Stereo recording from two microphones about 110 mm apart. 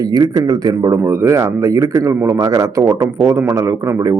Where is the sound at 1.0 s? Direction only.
25° right (ahead or behind).